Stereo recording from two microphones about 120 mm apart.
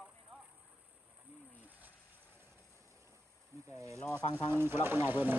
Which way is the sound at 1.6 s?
15° right (ahead or behind).